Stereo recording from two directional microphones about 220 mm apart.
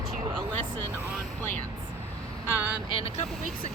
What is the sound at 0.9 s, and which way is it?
Speech, 10° right (ahead or behind).